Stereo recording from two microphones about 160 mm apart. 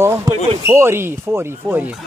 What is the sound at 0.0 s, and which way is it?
Speech, 15° right (ahead or behind).